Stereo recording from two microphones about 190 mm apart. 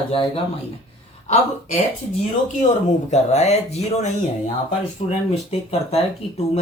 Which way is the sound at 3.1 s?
35° left (ahead or behind).